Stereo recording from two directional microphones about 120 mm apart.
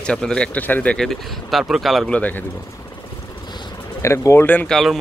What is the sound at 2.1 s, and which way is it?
Speech, 15° left (ahead or behind).